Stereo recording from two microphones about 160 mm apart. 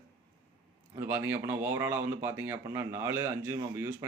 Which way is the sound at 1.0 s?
15° right (ahead or behind).